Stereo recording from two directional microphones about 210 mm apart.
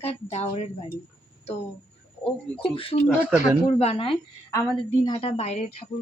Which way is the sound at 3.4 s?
30° left (ahead or behind).